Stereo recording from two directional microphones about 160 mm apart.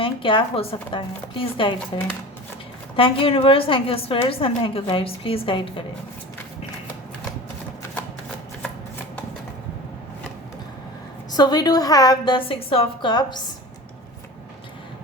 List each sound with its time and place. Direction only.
0.0 s a woman's voice: 35° left (ahead or behind)
11.3 s a woman's voice: 25° left (ahead or behind)